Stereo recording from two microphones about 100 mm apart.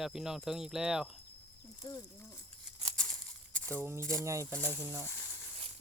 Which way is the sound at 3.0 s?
10° left (ahead or behind).